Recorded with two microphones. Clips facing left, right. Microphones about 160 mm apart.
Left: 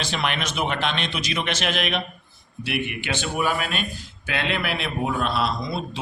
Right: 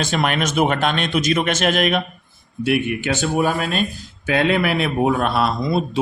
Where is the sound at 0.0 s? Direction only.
45° right (ahead or behind).